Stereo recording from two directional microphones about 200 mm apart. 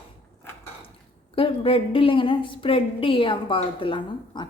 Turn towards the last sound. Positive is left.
turn(degrees=25)  # may be behind; listen again after turning